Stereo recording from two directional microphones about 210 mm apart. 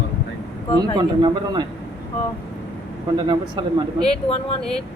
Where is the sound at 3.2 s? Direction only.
20° right (ahead or behind).